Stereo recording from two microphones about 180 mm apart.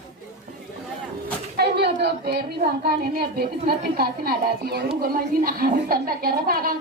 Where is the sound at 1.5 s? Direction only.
65° right (ahead or behind).